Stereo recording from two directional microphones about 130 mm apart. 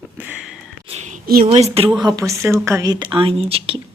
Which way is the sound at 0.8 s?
60° right (ahead or behind).